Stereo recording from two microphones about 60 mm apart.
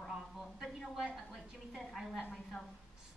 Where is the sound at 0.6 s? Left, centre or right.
Centre.